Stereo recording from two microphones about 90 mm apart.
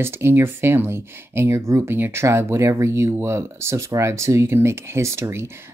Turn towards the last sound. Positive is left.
turn(degrees=-30)  # may be behind; listen again after turning